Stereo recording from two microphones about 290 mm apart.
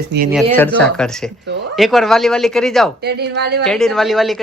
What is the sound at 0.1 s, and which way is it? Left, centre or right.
Speech, right.